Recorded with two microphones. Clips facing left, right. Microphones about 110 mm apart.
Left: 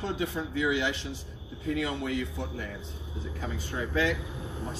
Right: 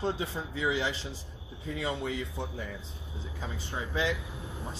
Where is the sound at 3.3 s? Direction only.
25° right (ahead or behind).